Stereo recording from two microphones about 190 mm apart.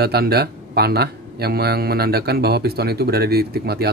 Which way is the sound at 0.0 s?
55° right (ahead or behind).